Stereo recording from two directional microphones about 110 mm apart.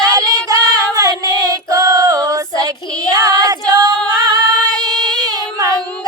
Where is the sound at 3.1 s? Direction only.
35° right (ahead or behind).